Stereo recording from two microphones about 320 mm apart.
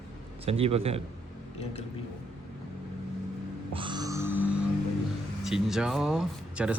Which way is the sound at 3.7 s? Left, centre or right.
Centre.